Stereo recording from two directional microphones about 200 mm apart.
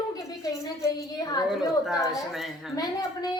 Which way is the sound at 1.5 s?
Centre (ahead or behind).